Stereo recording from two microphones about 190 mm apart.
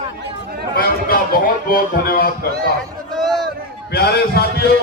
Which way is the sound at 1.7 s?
50° left (ahead or behind).